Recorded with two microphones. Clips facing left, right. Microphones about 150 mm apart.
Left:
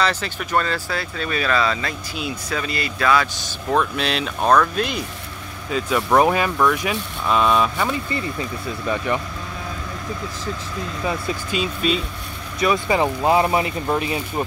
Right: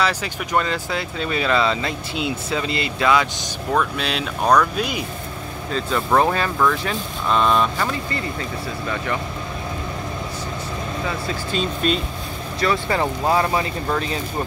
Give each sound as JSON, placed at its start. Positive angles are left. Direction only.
{"t": 0.0, "sound": "speech", "side_deg": -10}
{"t": 3.7, "sound": "speech", "side_deg": 0}
{"t": 5.7, "sound": "speech", "side_deg": 10}
{"t": 11.1, "sound": "speech", "side_deg": 10}